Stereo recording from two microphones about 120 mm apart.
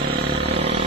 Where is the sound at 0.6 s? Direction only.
55° right (ahead or behind).